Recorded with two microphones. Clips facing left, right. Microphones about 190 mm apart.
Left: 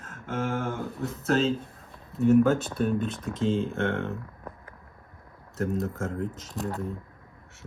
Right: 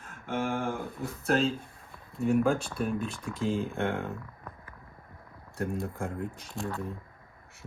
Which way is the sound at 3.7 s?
10° right (ahead or behind).